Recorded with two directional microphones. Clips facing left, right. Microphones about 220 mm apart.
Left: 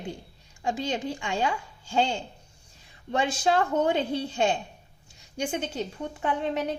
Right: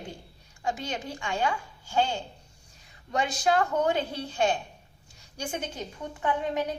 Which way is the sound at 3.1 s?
25° left (ahead or behind).